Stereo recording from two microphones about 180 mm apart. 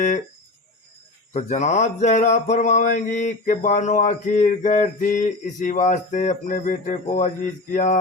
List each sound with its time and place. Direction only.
1.3 s mantra: 40° left (ahead or behind)
7.7 s speech: 45° left (ahead or behind)